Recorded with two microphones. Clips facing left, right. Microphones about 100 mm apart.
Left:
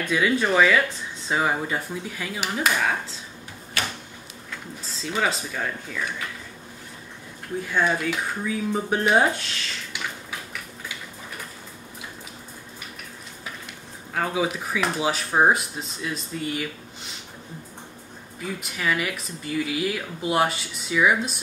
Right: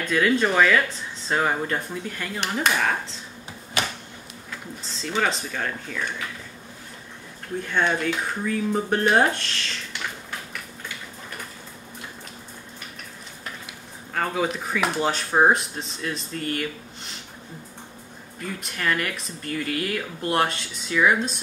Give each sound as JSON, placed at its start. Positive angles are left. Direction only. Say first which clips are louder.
{"t": 0.1, "sound": "speech", "louder": "right 1 dB", "side_deg": 5}
{"t": 3.8, "sound": "a sound", "louder": "right 2 dB", "side_deg": -20}
{"t": 4.5, "sound": "speech", "louder": "even", "side_deg": 5}
{"t": 7.6, "sound": "speech", "louder": "even", "side_deg": 5}
{"t": 13.4, "sound": "speech", "louder": "right 1 dB", "side_deg": 5}
{"t": 18.4, "sound": "speech", "louder": "even", "side_deg": 5}